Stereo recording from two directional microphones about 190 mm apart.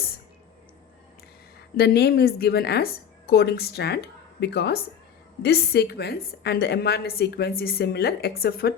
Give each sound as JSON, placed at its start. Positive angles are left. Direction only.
{"t": 1.7, "sound": "a woman's voice", "side_deg": 55}